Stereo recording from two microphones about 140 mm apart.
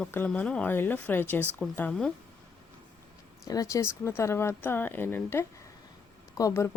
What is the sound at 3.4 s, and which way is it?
A woman's voice, 25° left (ahead or behind).